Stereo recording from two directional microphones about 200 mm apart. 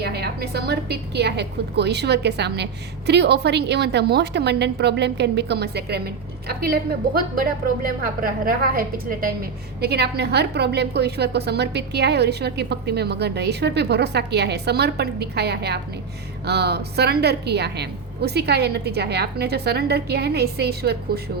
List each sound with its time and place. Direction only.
0.0 s a woman's voice: 55° right (ahead or behind)